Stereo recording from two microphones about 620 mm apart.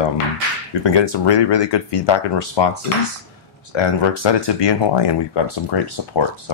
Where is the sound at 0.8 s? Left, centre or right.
Left.